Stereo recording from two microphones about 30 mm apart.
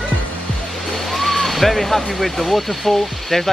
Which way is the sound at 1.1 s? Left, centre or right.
Centre.